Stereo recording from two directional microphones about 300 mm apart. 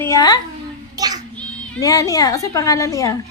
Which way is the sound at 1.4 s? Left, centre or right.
Centre.